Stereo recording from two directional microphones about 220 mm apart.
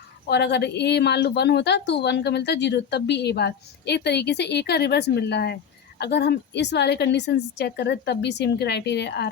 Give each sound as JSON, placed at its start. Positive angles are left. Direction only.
{"t": 0.3, "sound": "a woman's voice", "side_deg": 50}